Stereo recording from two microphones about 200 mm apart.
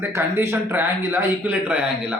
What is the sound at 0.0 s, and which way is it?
A man's voice, 10° right (ahead or behind).